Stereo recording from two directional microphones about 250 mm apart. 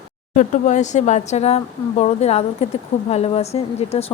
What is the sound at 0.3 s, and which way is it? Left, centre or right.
Speech, left.